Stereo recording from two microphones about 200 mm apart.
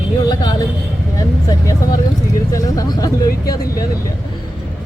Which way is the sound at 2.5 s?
15° left (ahead or behind).